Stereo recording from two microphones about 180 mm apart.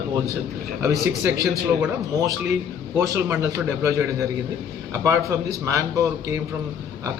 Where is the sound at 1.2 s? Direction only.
20° right (ahead or behind).